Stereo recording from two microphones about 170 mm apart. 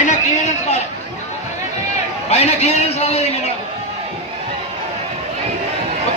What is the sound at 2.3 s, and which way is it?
Speech, 40° left (ahead or behind).